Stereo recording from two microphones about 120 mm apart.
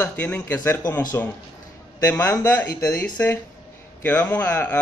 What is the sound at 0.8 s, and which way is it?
Speech, 30° left (ahead or behind).